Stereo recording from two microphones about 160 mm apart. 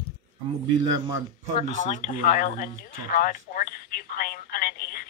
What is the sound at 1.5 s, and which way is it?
Speech, 50° left (ahead or behind).